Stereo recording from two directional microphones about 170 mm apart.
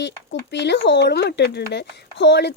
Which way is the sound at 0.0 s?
90° left.